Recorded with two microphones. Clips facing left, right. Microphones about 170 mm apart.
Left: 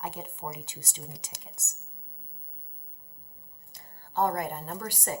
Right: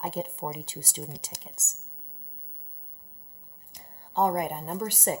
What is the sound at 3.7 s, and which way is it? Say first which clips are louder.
A woman's voice: right 2 dB; 20° right (ahead or behind).